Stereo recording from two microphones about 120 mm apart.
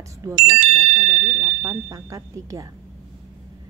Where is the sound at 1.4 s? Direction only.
30° right (ahead or behind).